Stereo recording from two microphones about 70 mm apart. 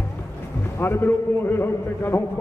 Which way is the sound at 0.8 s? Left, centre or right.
Left.